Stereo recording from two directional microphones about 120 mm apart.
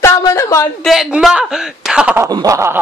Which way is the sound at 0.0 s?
25° left (ahead or behind).